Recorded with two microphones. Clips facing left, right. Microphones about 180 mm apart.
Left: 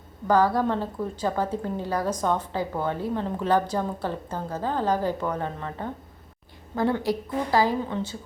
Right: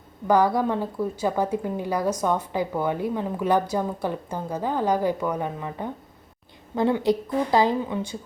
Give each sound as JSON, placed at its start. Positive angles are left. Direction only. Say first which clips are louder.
{"t": 0.3, "sound": "a woman's voice", "louder": "right 1 dB", "side_deg": -15}